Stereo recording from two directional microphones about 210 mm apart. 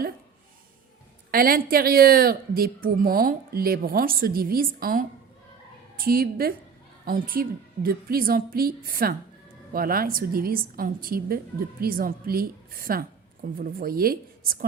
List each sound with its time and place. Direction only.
1.3 s speech: 45° right (ahead or behind)
6.1 s a woman's voice: 45° right (ahead or behind)